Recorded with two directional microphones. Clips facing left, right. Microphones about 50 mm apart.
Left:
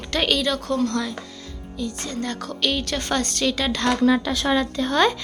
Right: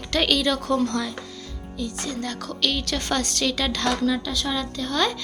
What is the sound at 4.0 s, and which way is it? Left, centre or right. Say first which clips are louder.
Speech: left 5 dB; left.